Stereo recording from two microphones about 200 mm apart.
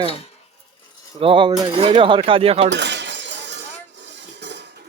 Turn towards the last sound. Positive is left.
turn(degrees=-60)  # may be behind; listen again after turning